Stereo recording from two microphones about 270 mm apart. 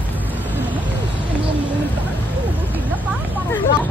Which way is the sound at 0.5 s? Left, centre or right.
Centre.